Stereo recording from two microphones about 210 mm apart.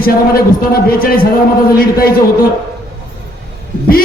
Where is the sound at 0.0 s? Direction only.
45° left (ahead or behind).